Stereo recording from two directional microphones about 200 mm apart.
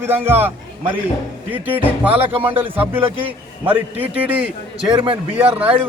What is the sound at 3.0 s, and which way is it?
Speech, 25° right (ahead or behind).